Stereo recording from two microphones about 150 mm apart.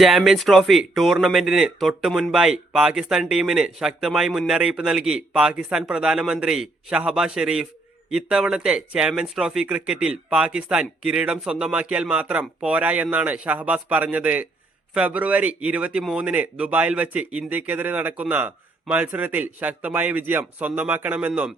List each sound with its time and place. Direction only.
0.0 s speech: centre (ahead or behind)